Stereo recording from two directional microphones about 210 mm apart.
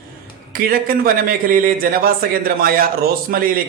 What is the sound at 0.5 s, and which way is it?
A man's voice, 45° right (ahead or behind).